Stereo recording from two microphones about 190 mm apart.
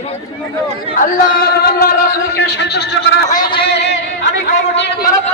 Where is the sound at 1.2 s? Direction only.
55° left (ahead or behind).